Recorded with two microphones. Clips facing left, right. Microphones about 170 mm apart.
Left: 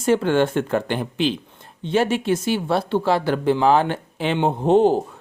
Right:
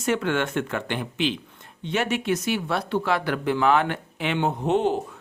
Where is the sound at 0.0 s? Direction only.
30° left (ahead or behind).